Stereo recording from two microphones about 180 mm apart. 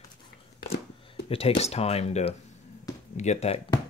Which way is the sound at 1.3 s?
35° left (ahead or behind).